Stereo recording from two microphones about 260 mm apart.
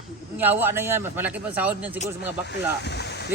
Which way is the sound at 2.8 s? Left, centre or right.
Left.